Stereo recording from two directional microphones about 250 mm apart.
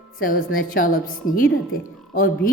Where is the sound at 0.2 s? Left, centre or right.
Left.